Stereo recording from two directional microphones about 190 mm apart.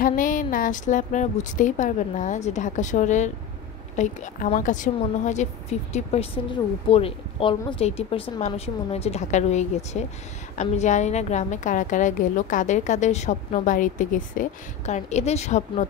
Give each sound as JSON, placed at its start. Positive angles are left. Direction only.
{"t": 0.0, "sound": "a woman's voice", "side_deg": 45}